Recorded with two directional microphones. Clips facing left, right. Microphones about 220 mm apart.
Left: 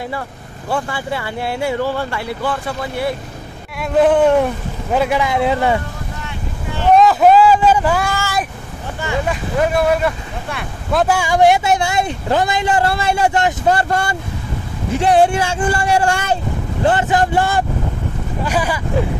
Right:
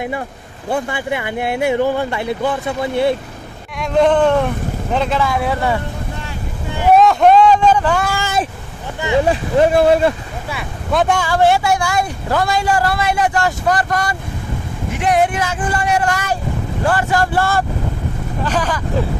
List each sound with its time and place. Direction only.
0.7 s speech: 20° right (ahead or behind)
3.8 s a man's voice: 5° left (ahead or behind); by 5.8 s 20° left (ahead or behind)
6.8 s speech: 5° right (ahead or behind)
8.1 s speech: 20° right (ahead or behind)
9.2 s speech: 30° right (ahead or behind)
10.5 s speech: centre (ahead or behind)
11.2 s a man's voice: 15° left (ahead or behind)